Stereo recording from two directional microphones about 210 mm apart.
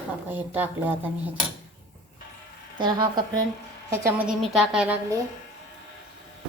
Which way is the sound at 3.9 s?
10° right (ahead or behind).